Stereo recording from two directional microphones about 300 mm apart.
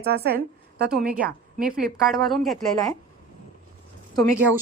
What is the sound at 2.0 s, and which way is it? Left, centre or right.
Speech, centre.